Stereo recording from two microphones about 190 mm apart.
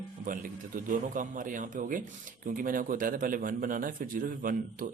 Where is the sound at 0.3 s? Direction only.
45° right (ahead or behind).